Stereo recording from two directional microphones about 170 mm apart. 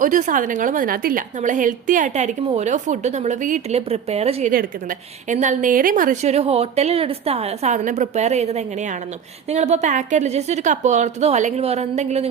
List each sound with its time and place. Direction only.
0.0 s a woman's voice: 50° right (ahead or behind)
4.5 s a woman's voice: 50° right (ahead or behind)